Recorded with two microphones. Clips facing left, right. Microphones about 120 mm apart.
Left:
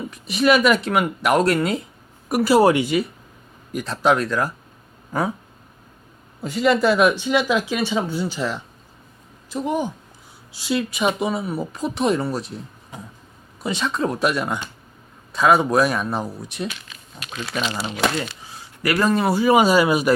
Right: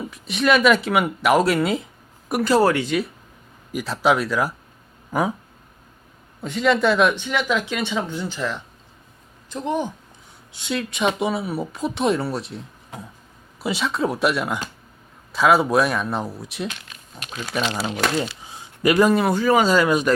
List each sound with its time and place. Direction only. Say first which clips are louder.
0.1 s speech: left 2 dB; centre (ahead or behind)
3.7 s speech: left 1 dB; 5° right (ahead or behind)
6.4 s speech: left 1 dB; 5° left (ahead or behind)
17.3 s speech: right 1 dB; 10° right (ahead or behind)
19.1 s speech: left 1 dB; 5° left (ahead or behind)